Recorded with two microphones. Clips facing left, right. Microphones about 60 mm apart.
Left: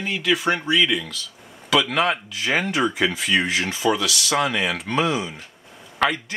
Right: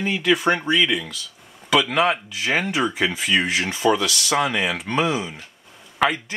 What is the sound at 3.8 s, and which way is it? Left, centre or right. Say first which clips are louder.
Speech: right 3 dB; centre.